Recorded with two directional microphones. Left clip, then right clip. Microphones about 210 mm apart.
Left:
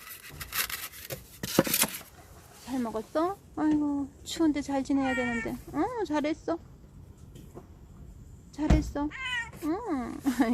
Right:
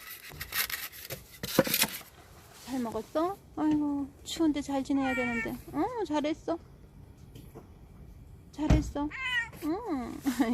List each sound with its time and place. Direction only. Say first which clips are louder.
0.0 s rub: even; 35° left (ahead or behind)
2.6 s speech: left 2 dB; centre (ahead or behind)
8.8 s speech: left 1 dB; centre (ahead or behind)